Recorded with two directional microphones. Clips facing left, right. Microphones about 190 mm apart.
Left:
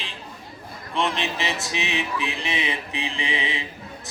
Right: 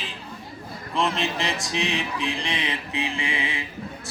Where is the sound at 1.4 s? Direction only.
5° left (ahead or behind); by 3.7 s 20° left (ahead or behind).